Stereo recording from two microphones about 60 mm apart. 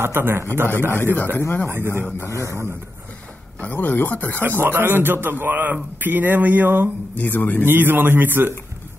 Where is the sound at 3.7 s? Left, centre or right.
Left.